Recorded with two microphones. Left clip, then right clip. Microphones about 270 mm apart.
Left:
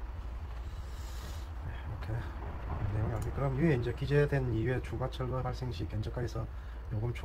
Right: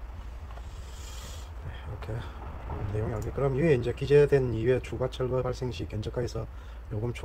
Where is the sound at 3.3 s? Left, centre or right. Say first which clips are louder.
Right 7 dB; right.